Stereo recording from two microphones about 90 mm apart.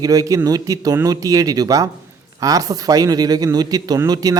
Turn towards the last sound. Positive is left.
turn(degrees=-45)  # may be behind; listen again after turning